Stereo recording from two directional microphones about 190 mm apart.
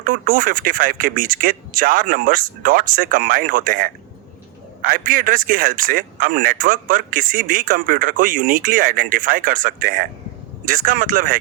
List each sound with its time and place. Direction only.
0.0 s a man's voice: 45° right (ahead or behind)